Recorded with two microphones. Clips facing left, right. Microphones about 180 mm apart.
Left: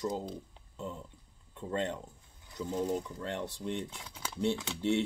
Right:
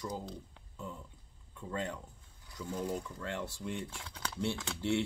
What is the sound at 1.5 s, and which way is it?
Speech, 25° left (ahead or behind).